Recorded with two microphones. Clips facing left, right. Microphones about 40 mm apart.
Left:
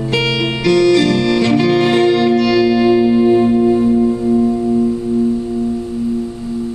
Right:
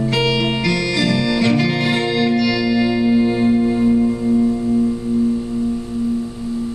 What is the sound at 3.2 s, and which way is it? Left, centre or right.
Music, centre.